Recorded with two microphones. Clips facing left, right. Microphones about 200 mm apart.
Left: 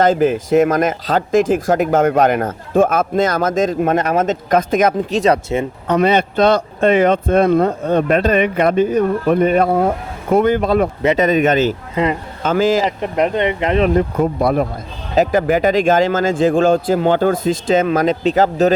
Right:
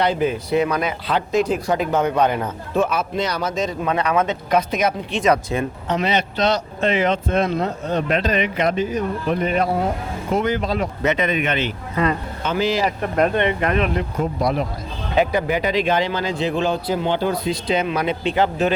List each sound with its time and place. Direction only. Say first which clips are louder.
0.0 s speech: left 6 dB; 45° left (ahead or behind)
2.1 s a man's voice: left 5 dB; 90° left
2.4 s speech: left 6 dB; 50° left (ahead or behind)
5.2 s speech: left 1 dB; 30° left (ahead or behind)
5.9 s speech: left 8 dB; 55° left (ahead or behind)
11.0 s a man's voice: left 5 dB; 35° left (ahead or behind)
13.0 s speech: left 2 dB; 15° left (ahead or behind)
13.7 s speech: left 7 dB; 35° left (ahead or behind)
14.2 s speech: left 5 dB; 55° left (ahead or behind)